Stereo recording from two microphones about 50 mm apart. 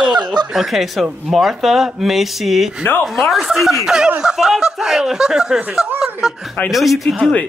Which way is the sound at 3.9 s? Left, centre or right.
Centre.